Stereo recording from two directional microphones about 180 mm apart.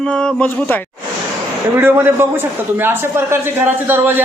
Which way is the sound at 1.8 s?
10° right (ahead or behind).